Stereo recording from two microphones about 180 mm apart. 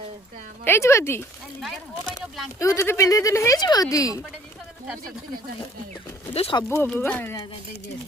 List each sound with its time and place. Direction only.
0.6 s speech: 15° left (ahead or behind)
1.6 s speech: centre (ahead or behind)
2.6 s speech: 15° left (ahead or behind)
6.3 s speech: 30° left (ahead or behind)
6.7 s speech: 10° left (ahead or behind)